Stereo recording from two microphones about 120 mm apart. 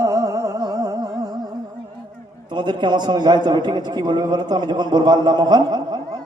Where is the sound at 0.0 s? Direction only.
30° right (ahead or behind).